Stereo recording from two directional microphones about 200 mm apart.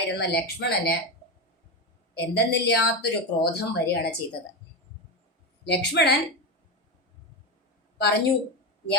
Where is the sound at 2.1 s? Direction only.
55° left (ahead or behind).